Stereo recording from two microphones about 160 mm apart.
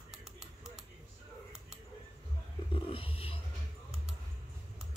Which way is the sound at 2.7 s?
35° left (ahead or behind).